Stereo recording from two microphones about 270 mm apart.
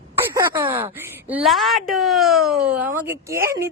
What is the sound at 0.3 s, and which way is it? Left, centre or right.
A woman's voice, centre.